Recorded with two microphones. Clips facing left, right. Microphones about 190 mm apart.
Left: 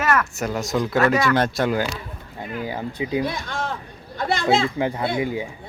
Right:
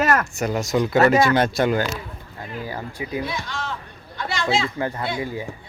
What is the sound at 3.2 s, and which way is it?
Speech, 50° left (ahead or behind).